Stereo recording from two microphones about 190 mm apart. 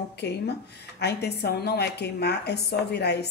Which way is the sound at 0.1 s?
60° left (ahead or behind).